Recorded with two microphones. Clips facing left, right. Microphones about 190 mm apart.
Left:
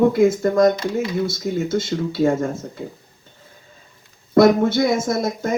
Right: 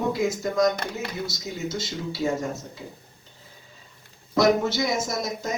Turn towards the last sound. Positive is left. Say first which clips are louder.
# left 7 dB
turn(degrees=55)  # may be behind; listen again after turning